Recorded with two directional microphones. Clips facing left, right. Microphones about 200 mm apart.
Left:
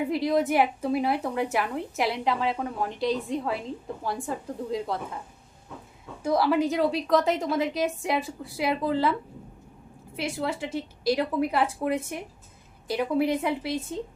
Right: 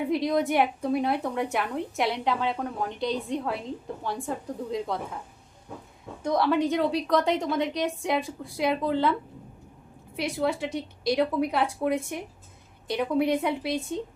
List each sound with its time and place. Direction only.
0.0 s a woman's voice: centre (ahead or behind)
6.2 s a woman's voice: 5° left (ahead or behind)
10.2 s a woman's voice: centre (ahead or behind)